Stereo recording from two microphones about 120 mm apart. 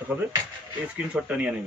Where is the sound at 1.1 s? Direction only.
10° right (ahead or behind).